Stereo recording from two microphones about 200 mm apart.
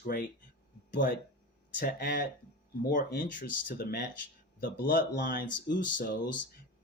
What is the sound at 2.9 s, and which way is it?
Speech, 40° left (ahead or behind).